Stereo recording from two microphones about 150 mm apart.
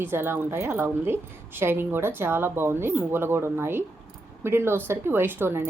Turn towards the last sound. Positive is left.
turn(degrees=-15)  # may be behind; listen again after turning